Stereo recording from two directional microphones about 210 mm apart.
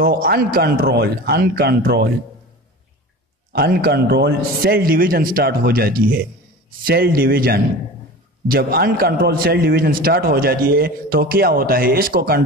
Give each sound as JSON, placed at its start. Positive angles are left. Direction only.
{"t": 0.0, "sound": "a man's voice", "side_deg": -45}
{"t": 3.5, "sound": "a man's voice", "side_deg": -50}